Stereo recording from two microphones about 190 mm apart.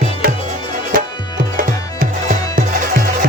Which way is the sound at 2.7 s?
50° right (ahead or behind).